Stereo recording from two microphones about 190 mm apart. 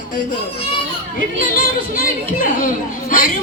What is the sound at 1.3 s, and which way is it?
Speech, 45° left (ahead or behind).